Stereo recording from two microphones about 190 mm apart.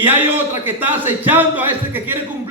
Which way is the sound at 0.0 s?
10° right (ahead or behind).